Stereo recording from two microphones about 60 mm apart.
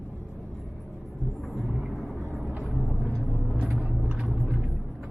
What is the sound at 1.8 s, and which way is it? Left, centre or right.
Vehicle, centre.